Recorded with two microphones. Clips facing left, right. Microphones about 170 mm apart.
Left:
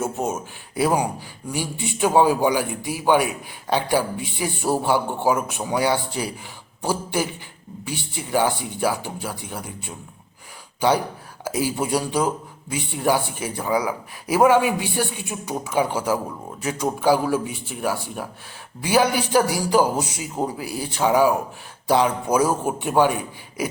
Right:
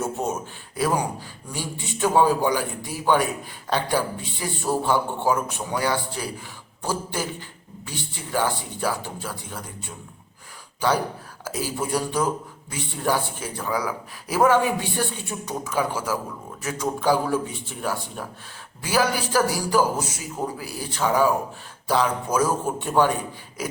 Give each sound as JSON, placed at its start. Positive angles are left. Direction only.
{"t": 0.0, "sound": "a man's voice", "side_deg": 5}
{"t": 11.4, "sound": "a man's voice", "side_deg": 15}